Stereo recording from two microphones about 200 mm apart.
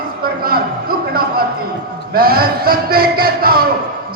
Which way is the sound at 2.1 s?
50° right (ahead or behind).